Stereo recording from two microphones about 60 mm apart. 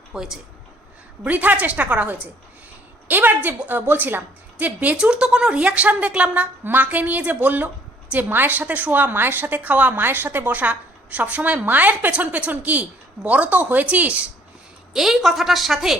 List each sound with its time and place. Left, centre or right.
0.1 s a woman's voice: centre
1.2 s a woman's voice: right
10.0 s a woman's voice: right
14.9 s a woman's voice: centre